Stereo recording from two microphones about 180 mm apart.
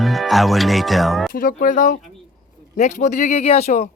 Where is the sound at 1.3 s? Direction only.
50° left (ahead or behind).